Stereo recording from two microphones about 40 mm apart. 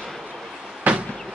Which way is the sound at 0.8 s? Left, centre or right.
Right.